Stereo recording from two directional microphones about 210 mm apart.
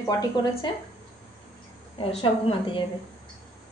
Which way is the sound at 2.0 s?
25° left (ahead or behind).